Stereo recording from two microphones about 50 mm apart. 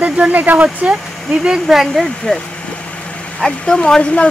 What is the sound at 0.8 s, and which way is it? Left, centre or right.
Speech, centre.